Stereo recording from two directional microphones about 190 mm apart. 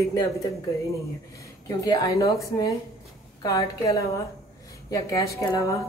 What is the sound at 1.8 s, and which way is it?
A woman's voice, 20° left (ahead or behind).